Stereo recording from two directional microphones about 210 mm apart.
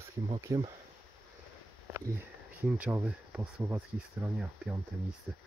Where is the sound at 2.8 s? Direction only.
5° right (ahead or behind).